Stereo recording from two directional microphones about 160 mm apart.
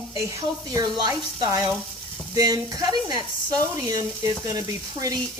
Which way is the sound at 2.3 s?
20° right (ahead or behind).